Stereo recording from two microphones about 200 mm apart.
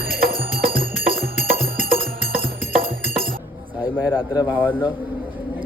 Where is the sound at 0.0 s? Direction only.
50° right (ahead or behind).